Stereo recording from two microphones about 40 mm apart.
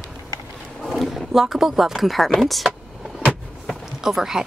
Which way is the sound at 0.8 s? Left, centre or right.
Centre.